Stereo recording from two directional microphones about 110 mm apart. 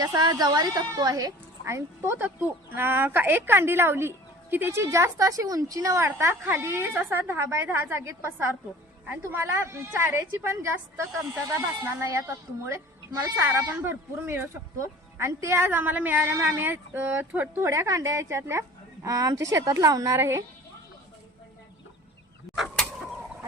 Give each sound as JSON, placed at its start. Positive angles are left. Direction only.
{"t": 0.0, "sound": "speech", "side_deg": -35}
{"t": 17.6, "sound": "speech", "side_deg": -25}
{"t": 22.5, "sound": "a sound", "side_deg": 5}